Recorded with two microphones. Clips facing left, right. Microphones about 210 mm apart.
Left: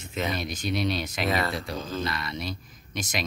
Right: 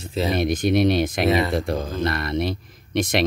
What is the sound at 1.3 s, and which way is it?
Speech, 20° right (ahead or behind).